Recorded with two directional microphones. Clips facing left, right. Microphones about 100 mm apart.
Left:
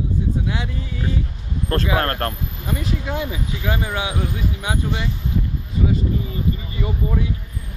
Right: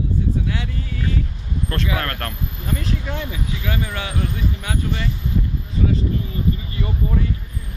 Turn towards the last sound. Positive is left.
turn(degrees=10)  # may be behind; listen again after turning